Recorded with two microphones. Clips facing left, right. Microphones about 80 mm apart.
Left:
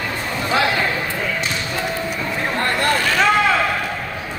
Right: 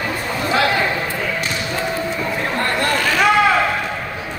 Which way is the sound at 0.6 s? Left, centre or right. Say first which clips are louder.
Right 1 dB; centre.